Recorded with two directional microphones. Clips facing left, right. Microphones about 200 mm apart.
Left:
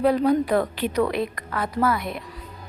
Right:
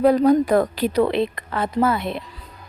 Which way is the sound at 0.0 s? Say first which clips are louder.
Right 4 dB; 45° right (ahead or behind).